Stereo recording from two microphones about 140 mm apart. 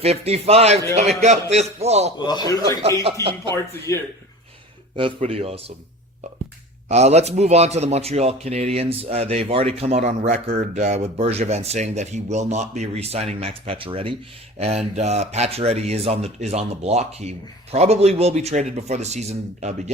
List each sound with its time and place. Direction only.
0.0 s a man's voice: 45° right (ahead or behind)
2.1 s a man's voice: 30° left (ahead or behind)
3.1 s a man's voice: 40° right (ahead or behind)
3.5 s speech: 20° left (ahead or behind)
5.2 s a man's voice: 45° right (ahead or behind)
6.8 s a man's voice: 50° right (ahead or behind)